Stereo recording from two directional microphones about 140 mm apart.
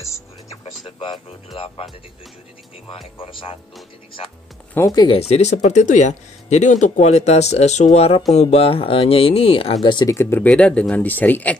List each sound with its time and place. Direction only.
0.0 s music: 20° left (ahead or behind)
0.8 s music: 35° left (ahead or behind)
3.2 s speech: 40° left (ahead or behind)
4.7 s speech: 25° left (ahead or behind)
5.3 s speech: 55° left (ahead or behind)
9.8 s speech: 30° left (ahead or behind)
10.1 s speech: 15° left (ahead or behind)